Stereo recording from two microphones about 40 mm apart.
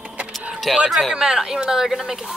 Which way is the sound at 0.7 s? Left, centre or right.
Centre.